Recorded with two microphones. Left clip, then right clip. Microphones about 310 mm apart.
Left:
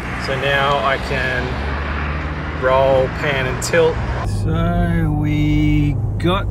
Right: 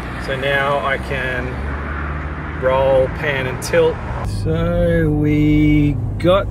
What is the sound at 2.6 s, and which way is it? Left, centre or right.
Speech, centre.